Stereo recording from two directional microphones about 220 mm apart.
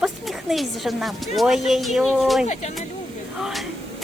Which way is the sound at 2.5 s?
30° left (ahead or behind).